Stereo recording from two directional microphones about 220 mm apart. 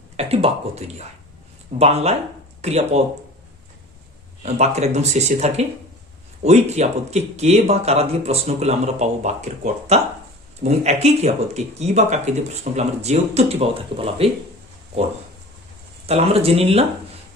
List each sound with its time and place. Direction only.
0.2 s speech: 30° right (ahead or behind)
4.4 s speech: 30° right (ahead or behind)
16.0 s speech: 25° right (ahead or behind)